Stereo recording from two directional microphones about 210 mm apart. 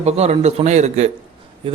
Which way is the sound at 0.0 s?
30° right (ahead or behind).